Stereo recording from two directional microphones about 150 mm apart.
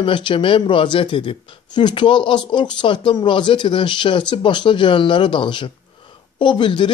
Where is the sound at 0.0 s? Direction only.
35° left (ahead or behind).